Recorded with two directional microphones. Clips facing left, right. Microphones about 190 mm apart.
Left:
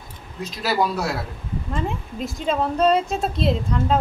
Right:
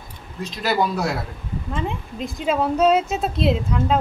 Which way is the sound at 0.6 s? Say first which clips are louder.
Right 1 dB; 5° left (ahead or behind).